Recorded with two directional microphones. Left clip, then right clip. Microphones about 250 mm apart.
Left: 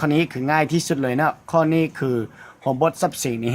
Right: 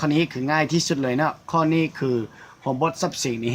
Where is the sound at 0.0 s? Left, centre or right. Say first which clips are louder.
Left 2 dB; left.